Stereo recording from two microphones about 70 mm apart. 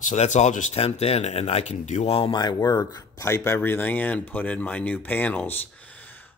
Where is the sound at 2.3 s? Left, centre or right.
Left.